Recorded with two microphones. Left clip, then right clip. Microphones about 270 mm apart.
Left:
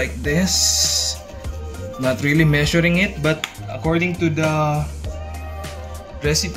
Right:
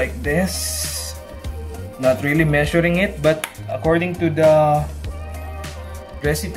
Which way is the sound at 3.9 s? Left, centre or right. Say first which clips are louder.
Right 1 dB; centre.